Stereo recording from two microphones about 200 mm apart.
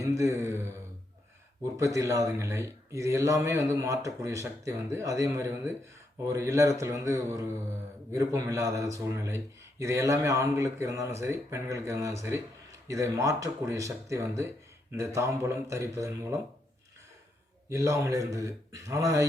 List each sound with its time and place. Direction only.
0.0 s a sound: 15° right (ahead or behind)
1.7 s speech: 15° right (ahead or behind)
17.7 s speech: 15° right (ahead or behind)